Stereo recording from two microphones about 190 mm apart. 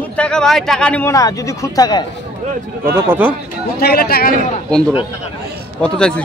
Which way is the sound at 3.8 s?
55° left (ahead or behind).